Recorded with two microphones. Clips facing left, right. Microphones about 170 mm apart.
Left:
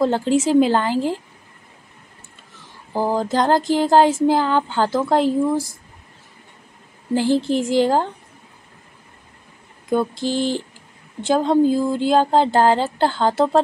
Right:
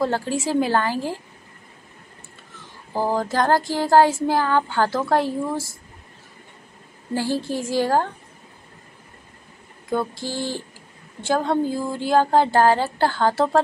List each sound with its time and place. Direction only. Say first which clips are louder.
0.0 s a woman's voice: left 5 dB; 20° left (ahead or behind)
2.9 s a sound: left 2 dB; 15° left (ahead or behind)
7.2 s a woman's voice: left 6 dB; 20° left (ahead or behind)
9.8 s a woman's voice: left 5 dB; 20° left (ahead or behind)